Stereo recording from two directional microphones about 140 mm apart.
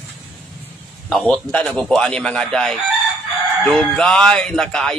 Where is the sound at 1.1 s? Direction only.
5° left (ahead or behind).